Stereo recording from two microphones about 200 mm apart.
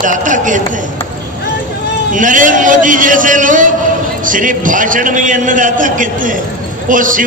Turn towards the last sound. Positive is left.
turn(degrees=-40)  # may be behind; listen again after turning